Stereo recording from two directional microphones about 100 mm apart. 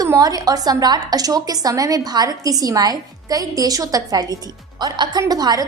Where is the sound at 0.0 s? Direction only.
35° right (ahead or behind).